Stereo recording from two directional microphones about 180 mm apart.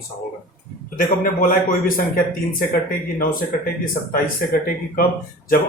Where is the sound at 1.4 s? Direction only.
50° left (ahead or behind).